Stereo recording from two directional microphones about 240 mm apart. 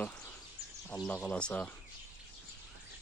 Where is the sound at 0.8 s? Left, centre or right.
Centre.